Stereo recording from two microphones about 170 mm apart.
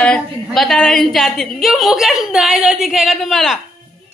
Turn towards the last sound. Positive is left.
turn(degrees=0)  # may be behind; listen again after turning